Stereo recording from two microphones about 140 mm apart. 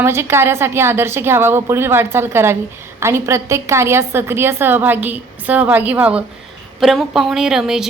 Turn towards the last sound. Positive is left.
turn(degrees=-5)  # may be behind; listen again after turning